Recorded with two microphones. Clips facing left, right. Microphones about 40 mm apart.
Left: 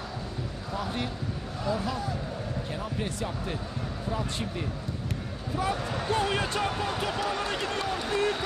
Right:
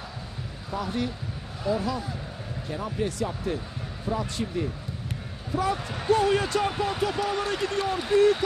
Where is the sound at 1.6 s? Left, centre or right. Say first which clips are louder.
Right 3 dB; centre.